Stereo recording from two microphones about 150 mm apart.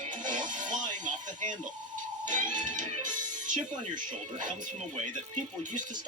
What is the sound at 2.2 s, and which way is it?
Speech, 60° right (ahead or behind).